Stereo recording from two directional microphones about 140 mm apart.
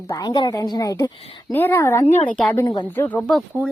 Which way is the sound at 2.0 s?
45° left (ahead or behind).